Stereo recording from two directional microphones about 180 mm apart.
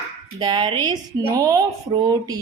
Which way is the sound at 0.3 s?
25° right (ahead or behind).